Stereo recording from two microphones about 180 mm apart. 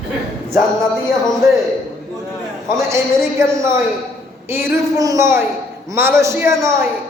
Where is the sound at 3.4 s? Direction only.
15° right (ahead or behind).